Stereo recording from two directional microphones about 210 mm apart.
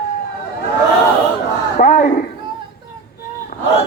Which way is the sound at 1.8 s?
35° left (ahead or behind).